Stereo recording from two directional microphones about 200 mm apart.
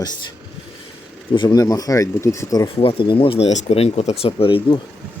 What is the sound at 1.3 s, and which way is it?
Speech, 20° left (ahead or behind).